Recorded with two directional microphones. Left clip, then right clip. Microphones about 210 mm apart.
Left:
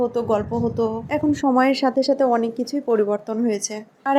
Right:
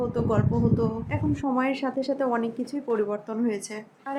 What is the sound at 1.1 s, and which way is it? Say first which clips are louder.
Speech: left 8 dB; 30° left (ahead or behind).